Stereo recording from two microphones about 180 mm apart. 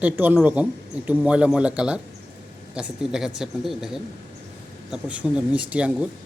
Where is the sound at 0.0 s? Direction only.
10° right (ahead or behind).